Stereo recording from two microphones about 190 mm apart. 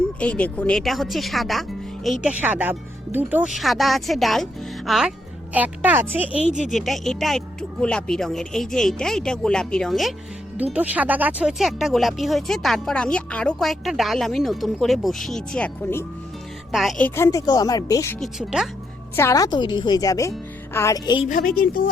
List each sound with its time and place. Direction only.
0.2 s a woman's voice: 5° left (ahead or behind); by 6.4 s 10° right (ahead or behind)
6.7 s speech: centre (ahead or behind)
17.2 s speech: 20° left (ahead or behind)
18.2 s speech: centre (ahead or behind)
19.1 s speech: 15° left (ahead or behind)
21.2 s a woman's voice: 45° left (ahead or behind)